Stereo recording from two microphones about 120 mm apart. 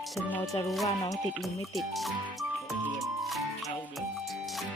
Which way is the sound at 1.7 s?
Centre (ahead or behind).